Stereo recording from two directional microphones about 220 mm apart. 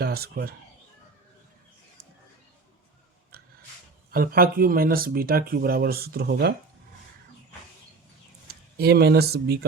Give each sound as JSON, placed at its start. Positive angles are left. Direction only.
{"t": 0.0, "sound": "speech", "side_deg": -45}
{"t": 4.1, "sound": "speech", "side_deg": -40}
{"t": 8.4, "sound": "speech", "side_deg": -45}